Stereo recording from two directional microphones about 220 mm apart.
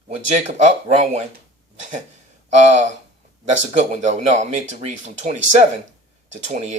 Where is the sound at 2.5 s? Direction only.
30° right (ahead or behind).